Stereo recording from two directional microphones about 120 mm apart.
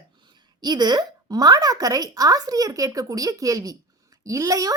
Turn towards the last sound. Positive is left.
turn(degrees=-30)  # may be behind; listen again after turning